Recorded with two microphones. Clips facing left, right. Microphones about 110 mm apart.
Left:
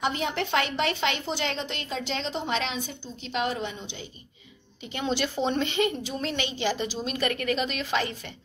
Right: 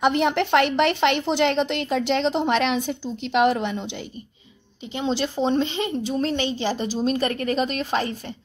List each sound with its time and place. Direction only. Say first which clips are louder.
0.0 s speech: right 8 dB; 70° right (ahead or behind)
4.9 s a woman's voice: right 4 dB; 30° right (ahead or behind)